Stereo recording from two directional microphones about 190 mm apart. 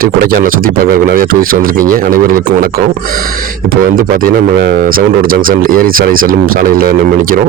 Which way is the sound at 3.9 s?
45° right (ahead or behind).